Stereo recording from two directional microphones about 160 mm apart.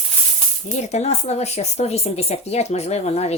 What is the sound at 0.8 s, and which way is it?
A woman's voice, 45° left (ahead or behind).